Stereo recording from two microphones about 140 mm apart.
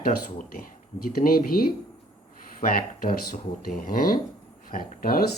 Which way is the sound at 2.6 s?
90° left.